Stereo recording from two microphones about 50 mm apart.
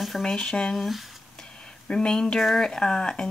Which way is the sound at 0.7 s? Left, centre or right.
Centre.